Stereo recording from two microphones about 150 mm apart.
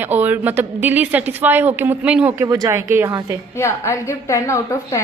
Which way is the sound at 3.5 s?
20° left (ahead or behind).